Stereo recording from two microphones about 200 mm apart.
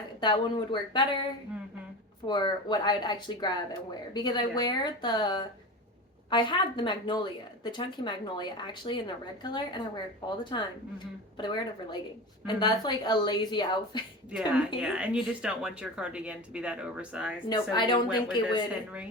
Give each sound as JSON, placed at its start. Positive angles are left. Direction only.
{"t": 0.2, "sound": "speech", "side_deg": 25}
{"t": 14.8, "sound": "a woman's voice", "side_deg": -5}
{"t": 17.5, "sound": "speech", "side_deg": 20}